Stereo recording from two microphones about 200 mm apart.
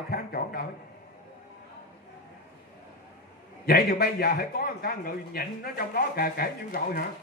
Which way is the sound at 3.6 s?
50° left (ahead or behind).